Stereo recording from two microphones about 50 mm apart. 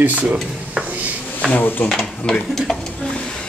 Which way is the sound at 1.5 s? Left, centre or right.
Left.